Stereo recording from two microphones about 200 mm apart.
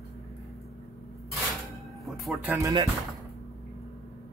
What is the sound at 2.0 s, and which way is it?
Speech, 5° right (ahead or behind).